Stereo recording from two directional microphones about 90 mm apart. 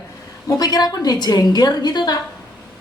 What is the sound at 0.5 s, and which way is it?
A woman's voice, 50° left (ahead or behind).